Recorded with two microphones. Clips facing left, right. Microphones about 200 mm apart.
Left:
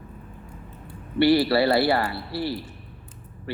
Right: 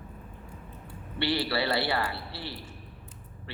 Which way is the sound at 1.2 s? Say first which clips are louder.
Left 10 dB; 40° left (ahead or behind).